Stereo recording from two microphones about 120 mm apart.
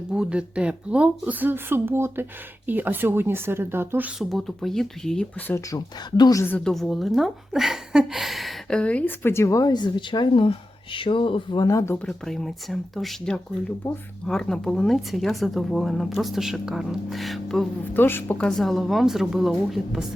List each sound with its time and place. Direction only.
0.1 s speech: 10° right (ahead or behind)
4.2 s speech: centre (ahead or behind)
5.5 s a woman's voice: 25° left (ahead or behind)
6.1 s a woman's voice: 35° left (ahead or behind)
6.7 s a woman's voice: centre (ahead or behind); by 11.9 s 30° left (ahead or behind)
12.0 s speech: 5° left (ahead or behind)
17.9 s speech: 15° left (ahead or behind); by 20.1 s 5° right (ahead or behind)